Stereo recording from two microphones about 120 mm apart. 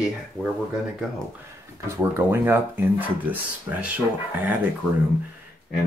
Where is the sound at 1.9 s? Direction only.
15° right (ahead or behind).